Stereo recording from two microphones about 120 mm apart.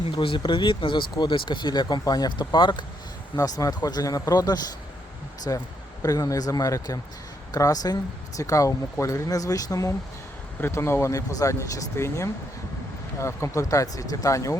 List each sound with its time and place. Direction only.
0.2 s speech: 40° left (ahead or behind)
3.3 s speech: 30° left (ahead or behind)